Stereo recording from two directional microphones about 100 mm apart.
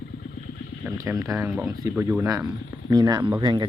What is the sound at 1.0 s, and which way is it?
A man's voice, 35° right (ahead or behind).